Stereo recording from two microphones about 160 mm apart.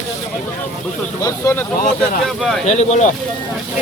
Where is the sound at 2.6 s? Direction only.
45° left (ahead or behind).